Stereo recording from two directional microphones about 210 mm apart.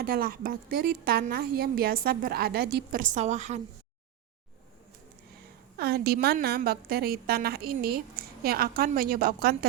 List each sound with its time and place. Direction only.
0.0 s a woman's voice: 45° right (ahead or behind)
5.7 s a woman's voice: 50° right (ahead or behind)